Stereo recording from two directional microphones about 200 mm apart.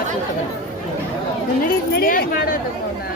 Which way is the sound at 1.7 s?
45° left (ahead or behind).